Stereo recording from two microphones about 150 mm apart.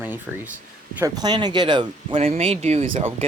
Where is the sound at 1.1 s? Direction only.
25° right (ahead or behind).